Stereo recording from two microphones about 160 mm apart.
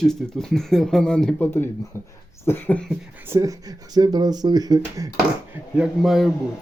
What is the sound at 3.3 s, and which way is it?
Speech, 20° right (ahead or behind).